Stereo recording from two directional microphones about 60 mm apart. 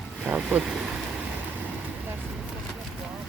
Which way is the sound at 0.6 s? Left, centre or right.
Right.